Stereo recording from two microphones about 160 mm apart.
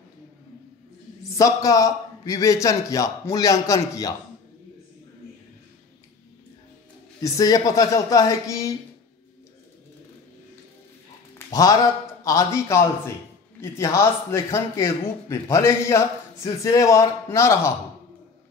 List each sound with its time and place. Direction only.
1.3 s a man's voice: 20° left (ahead or behind)
7.2 s a man's voice: 25° left (ahead or behind)
11.3 s a man's voice: 20° left (ahead or behind)